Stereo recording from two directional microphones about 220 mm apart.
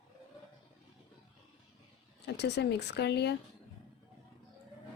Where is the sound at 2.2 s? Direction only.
50° left (ahead or behind).